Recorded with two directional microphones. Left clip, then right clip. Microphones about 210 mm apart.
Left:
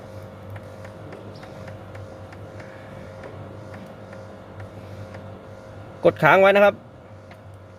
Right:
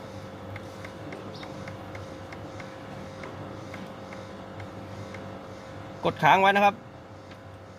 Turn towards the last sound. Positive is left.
turn(degrees=50)  # may be behind; listen again after turning